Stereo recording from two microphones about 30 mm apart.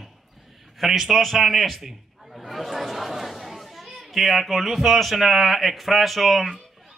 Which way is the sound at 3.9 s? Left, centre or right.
Centre.